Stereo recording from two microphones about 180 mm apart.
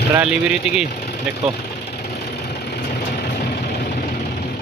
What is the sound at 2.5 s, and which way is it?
Vehicle, 65° left (ahead or behind).